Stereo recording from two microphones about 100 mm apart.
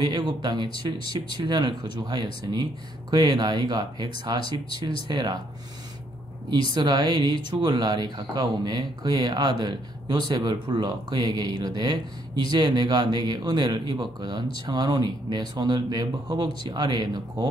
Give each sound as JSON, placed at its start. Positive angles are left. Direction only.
{"t": 0.0, "sound": "speech", "side_deg": -50}
{"t": 6.7, "sound": "speech", "side_deg": -50}